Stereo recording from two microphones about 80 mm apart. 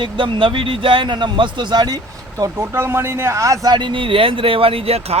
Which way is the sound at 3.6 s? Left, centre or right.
Right.